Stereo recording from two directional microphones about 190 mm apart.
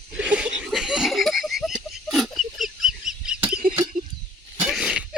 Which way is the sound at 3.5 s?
45° right (ahead or behind).